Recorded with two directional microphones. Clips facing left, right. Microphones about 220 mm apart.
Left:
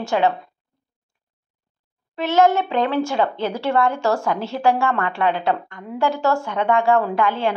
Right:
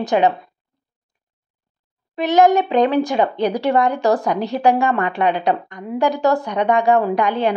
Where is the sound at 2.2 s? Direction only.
15° right (ahead or behind).